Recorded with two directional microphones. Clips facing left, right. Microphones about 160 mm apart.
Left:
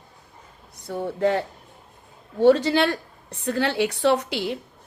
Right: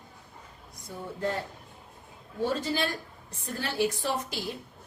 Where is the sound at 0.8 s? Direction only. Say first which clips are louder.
Left 10 dB; 75° left (ahead or behind).